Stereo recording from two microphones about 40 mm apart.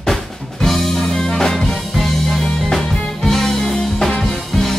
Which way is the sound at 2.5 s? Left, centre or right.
Centre.